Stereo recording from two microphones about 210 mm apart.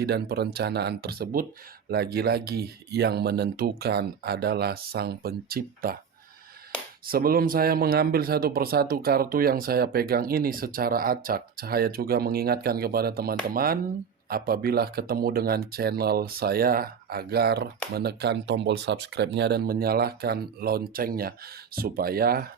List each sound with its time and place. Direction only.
0.0 s a man's voice: 50° right (ahead or behind)
7.1 s a man's voice: 45° right (ahead or behind)